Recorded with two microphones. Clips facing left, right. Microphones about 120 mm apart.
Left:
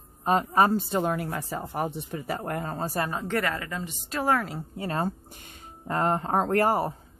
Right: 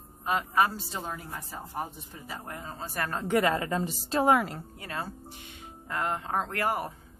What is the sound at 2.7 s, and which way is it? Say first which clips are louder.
Speech: left 7 dB; 40° left (ahead or behind).